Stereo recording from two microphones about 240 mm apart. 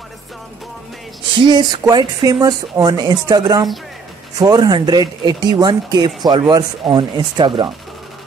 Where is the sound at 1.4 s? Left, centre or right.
Centre.